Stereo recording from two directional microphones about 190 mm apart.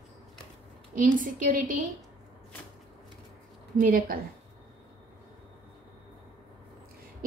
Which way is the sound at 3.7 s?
50° right (ahead or behind).